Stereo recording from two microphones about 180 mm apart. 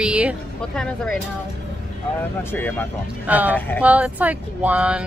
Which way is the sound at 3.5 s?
10° left (ahead or behind).